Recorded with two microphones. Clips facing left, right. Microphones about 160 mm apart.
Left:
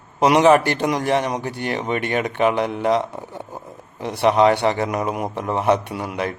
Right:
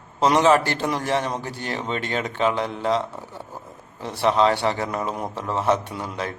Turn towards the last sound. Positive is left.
turn(degrees=10)  # may be behind; listen again after turning